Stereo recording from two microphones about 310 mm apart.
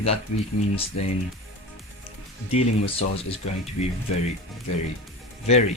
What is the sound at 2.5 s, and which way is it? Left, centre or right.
Speech, centre.